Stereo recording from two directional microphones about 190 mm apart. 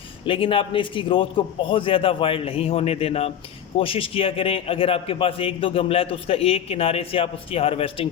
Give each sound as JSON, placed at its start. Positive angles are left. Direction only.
{"t": 0.3, "sound": "a man's voice", "side_deg": 30}